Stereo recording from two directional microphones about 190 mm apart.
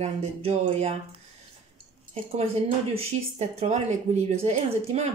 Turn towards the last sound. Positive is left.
turn(degrees=-35)  # may be behind; listen again after turning